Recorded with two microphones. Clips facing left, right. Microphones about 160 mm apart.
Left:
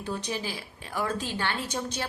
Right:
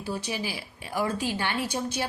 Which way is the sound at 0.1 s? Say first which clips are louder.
Right 1 dB; 10° right (ahead or behind).